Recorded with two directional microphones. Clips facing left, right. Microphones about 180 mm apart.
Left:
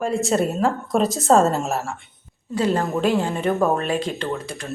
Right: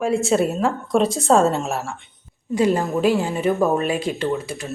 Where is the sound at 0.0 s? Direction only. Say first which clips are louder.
Right 2 dB; centre (ahead or behind).